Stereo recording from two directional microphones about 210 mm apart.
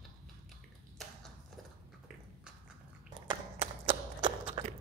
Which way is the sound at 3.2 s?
25° right (ahead or behind).